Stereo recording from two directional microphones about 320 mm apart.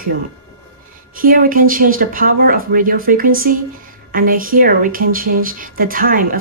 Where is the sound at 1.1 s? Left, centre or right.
Right.